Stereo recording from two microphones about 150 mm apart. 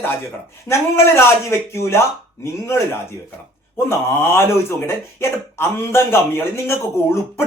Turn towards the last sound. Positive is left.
turn(degrees=15)  # may be behind; listen again after turning